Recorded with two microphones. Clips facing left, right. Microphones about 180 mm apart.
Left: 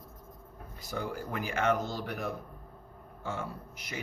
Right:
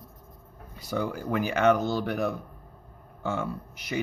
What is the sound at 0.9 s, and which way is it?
Speech, 75° right (ahead or behind).